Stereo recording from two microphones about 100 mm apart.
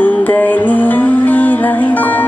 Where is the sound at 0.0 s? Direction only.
15° left (ahead or behind).